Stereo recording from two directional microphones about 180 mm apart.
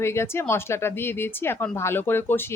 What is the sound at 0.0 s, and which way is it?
Speech, 15° left (ahead or behind).